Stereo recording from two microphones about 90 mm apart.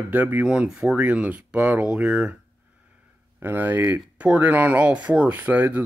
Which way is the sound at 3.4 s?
25° right (ahead or behind).